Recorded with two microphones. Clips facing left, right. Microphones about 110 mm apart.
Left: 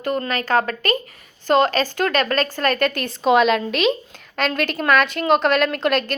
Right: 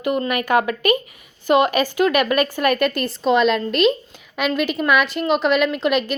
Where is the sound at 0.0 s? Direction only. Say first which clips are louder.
Right 2 dB; 10° right (ahead or behind).